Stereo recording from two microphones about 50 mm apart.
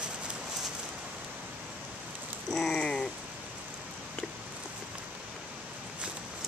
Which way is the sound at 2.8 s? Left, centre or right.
Centre.